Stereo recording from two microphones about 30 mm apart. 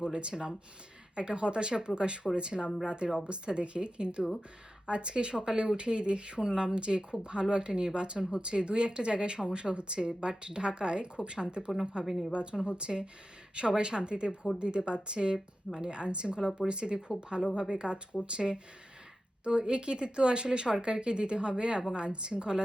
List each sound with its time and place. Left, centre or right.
0.0 s speech: right
12.0 s speech: centre
12.3 s speech: right